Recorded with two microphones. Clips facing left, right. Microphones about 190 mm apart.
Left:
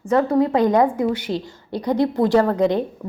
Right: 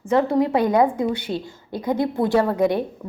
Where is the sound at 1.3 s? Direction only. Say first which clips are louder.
Left 2 dB; 20° left (ahead or behind).